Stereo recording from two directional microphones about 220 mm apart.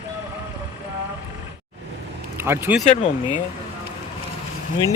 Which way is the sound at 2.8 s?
30° left (ahead or behind).